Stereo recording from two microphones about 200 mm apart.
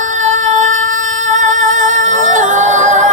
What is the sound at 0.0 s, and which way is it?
Music, 40° right (ahead or behind).